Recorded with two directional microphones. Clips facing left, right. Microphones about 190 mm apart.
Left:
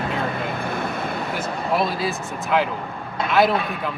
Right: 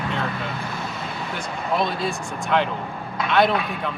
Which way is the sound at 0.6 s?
55° left (ahead or behind).